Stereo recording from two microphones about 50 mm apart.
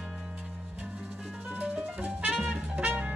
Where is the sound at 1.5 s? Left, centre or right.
Right.